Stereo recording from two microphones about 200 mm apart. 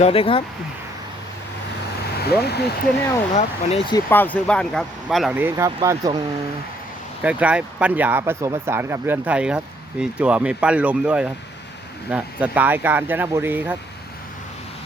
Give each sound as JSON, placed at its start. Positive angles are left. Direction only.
{"t": 0.0, "sound": "speech", "side_deg": 25}
{"t": 2.4, "sound": "speech", "side_deg": 55}
{"t": 3.3, "sound": "speech", "side_deg": 30}
{"t": 3.9, "sound": "speech", "side_deg": 10}
{"t": 7.2, "sound": "speech", "side_deg": -5}